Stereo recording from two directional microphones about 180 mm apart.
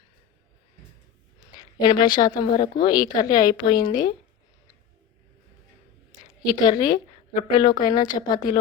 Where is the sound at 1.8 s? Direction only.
25° left (ahead or behind).